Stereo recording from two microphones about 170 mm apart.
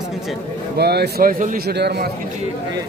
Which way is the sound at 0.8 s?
70° right (ahead or behind).